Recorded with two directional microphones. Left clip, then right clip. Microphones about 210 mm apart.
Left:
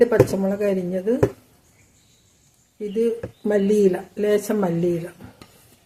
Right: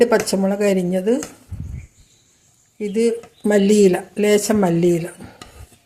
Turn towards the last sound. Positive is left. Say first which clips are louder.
# right 5 dB
turn(degrees=-25)  # may be behind; listen again after turning